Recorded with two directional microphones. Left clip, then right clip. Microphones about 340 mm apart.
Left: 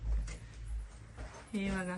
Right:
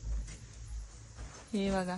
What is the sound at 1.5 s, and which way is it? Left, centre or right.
Speech, centre.